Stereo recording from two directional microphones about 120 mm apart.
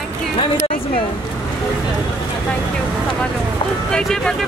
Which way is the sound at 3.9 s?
5° left (ahead or behind).